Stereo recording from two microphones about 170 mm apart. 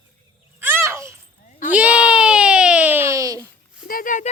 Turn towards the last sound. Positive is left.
turn(degrees=50)  # may be behind; listen again after turning